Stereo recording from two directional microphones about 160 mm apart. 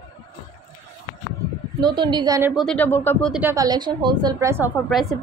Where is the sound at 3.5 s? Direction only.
20° right (ahead or behind).